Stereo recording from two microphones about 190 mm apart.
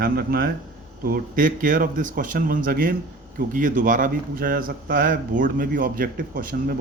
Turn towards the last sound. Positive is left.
turn(degrees=-50)  # may be behind; listen again after turning